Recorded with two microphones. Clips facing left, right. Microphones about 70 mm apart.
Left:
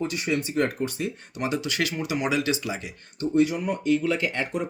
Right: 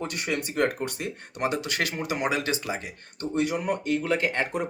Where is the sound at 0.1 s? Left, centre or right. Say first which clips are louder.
Left 3 dB; right.